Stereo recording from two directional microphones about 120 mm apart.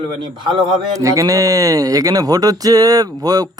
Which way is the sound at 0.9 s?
25° right (ahead or behind).